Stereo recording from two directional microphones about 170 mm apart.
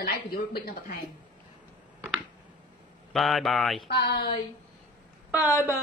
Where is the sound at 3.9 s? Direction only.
75° left (ahead or behind).